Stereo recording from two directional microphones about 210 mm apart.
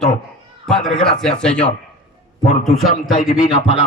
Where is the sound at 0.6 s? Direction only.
Centre (ahead or behind).